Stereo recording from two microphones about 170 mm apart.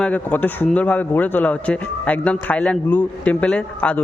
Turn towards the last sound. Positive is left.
turn(degrees=10)  # may be behind; listen again after turning